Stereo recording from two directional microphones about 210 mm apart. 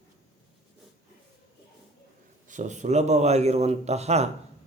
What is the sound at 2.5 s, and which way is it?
A man's voice, 35° right (ahead or behind).